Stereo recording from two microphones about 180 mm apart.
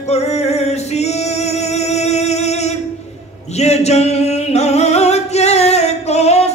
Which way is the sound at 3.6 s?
35° left (ahead or behind).